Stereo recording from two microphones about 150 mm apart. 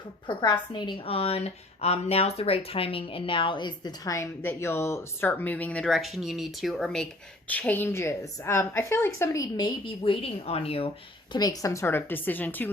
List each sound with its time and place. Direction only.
0.3 s a woman's voice: 30° left (ahead or behind)
10.0 s a woman's voice: 40° left (ahead or behind)
11.3 s a woman's voice: 25° left (ahead or behind)